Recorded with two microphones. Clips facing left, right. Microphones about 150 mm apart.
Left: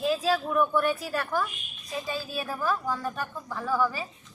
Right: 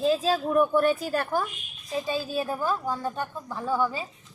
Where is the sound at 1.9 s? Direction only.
25° right (ahead or behind).